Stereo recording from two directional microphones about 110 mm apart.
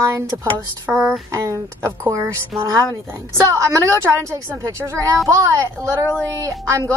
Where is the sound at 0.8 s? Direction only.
10° right (ahead or behind).